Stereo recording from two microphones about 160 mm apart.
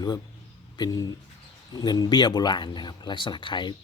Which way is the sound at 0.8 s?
25° left (ahead or behind).